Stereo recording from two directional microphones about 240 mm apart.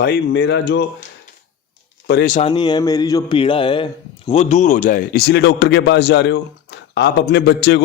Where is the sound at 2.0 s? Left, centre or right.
Left.